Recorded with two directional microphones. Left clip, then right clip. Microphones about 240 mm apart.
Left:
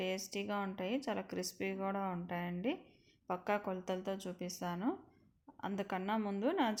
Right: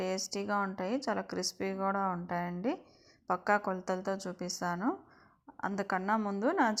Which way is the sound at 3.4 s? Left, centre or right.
Centre.